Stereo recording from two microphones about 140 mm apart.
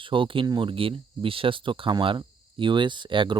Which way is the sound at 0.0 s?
40° right (ahead or behind).